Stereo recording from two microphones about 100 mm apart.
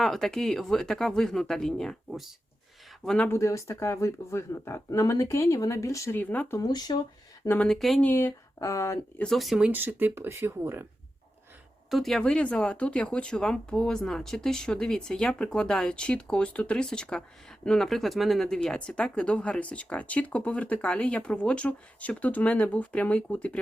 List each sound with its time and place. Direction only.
0.0 s speech: 5° left (ahead or behind)
3.2 s speech: 30° left (ahead or behind)
6.1 s speech: 15° left (ahead or behind)
6.6 s speech: 40° left (ahead or behind)
7.4 s speech: 20° left (ahead or behind)
7.7 s speech: centre (ahead or behind)
8.0 s speech: 25° left (ahead or behind)
9.1 s speech: 5° left (ahead or behind)
9.6 s speech: 20° right (ahead or behind)
11.9 s speech: centre (ahead or behind)